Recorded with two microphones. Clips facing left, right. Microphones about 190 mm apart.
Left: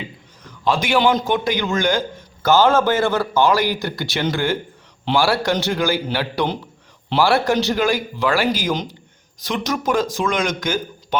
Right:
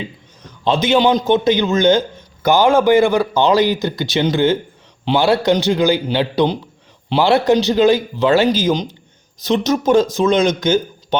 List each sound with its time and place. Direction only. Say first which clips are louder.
0.6 s a man's voice: right 3 dB; 20° right (ahead or behind)